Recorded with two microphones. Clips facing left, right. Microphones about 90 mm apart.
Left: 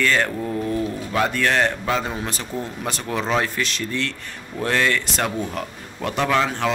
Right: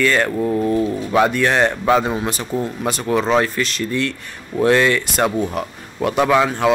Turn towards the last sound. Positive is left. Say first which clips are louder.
# right 5 dB
turn(degrees=-10)  # may be behind; listen again after turning